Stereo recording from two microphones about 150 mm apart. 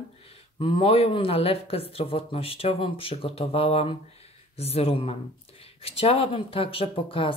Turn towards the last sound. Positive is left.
turn(degrees=35)  # may be behind; listen again after turning